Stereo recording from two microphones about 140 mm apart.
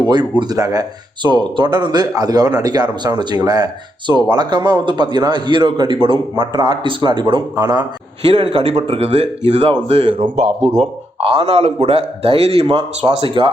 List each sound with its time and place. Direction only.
0.1 s a man's voice: 30° right (ahead or behind)
8.3 s speech: 40° right (ahead or behind)
10.8 s speech: 40° right (ahead or behind)